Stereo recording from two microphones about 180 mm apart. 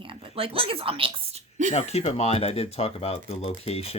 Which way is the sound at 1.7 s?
35° left (ahead or behind).